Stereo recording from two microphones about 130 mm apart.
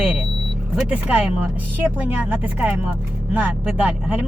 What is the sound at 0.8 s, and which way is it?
Speech, 5° right (ahead or behind).